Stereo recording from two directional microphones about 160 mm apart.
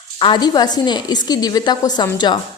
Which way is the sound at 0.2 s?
30° left (ahead or behind).